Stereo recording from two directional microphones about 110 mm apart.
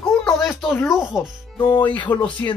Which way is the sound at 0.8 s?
5° right (ahead or behind).